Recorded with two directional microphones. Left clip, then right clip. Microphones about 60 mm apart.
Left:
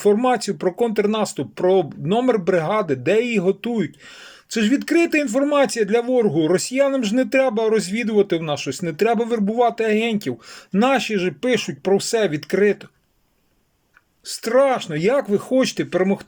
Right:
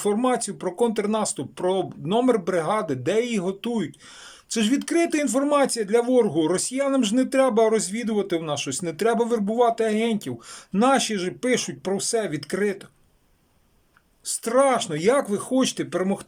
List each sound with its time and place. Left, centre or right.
0.0 s speech: centre
14.3 s speech: centre